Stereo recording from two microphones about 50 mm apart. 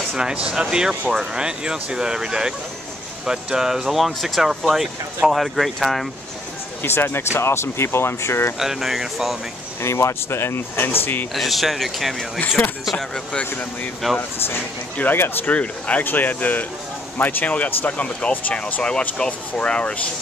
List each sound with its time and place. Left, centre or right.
0.1 s speech: centre
6.8 s speech: left
8.5 s speech: centre
9.8 s speech: left
11.3 s speech: centre
12.4 s speech: left
14.0 s speech: centre
15.1 s speech: left
15.5 s speech: left
16.0 s speech: left
18.8 s speech: centre